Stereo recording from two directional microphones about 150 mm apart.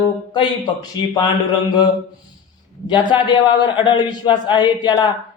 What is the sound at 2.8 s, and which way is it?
A man's voice, 30° left (ahead or behind).